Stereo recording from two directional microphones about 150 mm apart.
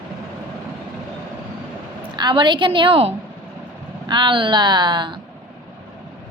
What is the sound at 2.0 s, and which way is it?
A woman's voice, 30° right (ahead or behind).